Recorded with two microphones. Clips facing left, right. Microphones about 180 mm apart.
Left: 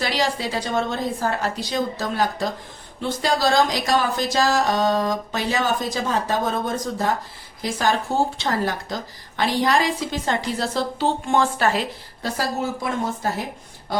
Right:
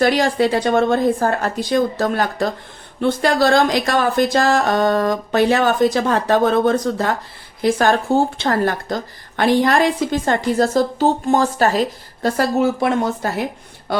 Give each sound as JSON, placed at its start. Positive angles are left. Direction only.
{"t": 0.0, "sound": "a woman's voice", "side_deg": -50}
{"t": 12.4, "sound": "speech", "side_deg": -75}